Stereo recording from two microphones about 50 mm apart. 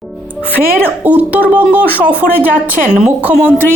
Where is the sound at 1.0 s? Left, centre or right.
Right.